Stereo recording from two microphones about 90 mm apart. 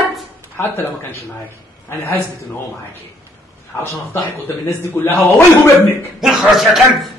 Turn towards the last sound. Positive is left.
turn(degrees=0)  # may be behind; listen again after turning